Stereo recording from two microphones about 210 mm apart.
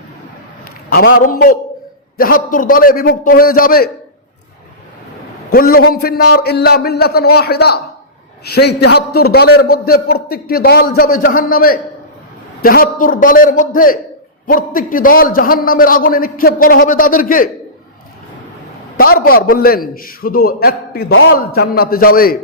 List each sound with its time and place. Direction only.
0.6 s a man's voice: 45° left (ahead or behind)
5.5 s a man's voice: 45° left (ahead or behind)
18.9 s a man's voice: 45° left (ahead or behind)